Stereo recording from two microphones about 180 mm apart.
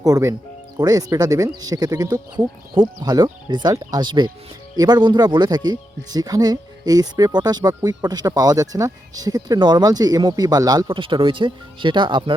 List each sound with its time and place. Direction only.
0.0 s speech: 20° right (ahead or behind)